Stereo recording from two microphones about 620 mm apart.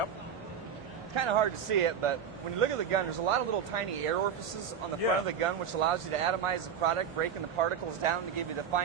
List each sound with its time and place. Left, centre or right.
1.1 s speech: right
5.4 s speech: right